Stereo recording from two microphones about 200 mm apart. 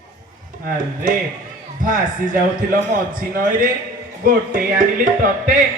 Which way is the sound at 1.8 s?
40° right (ahead or behind).